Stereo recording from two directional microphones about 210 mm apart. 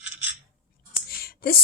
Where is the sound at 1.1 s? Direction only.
45° left (ahead or behind).